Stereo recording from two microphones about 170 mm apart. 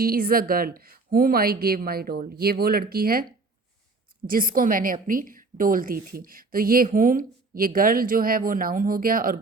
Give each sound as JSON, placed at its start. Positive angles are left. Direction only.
{"t": 0.0, "sound": "a woman's voice", "side_deg": -60}
{"t": 4.3, "sound": "a woman's voice", "side_deg": -55}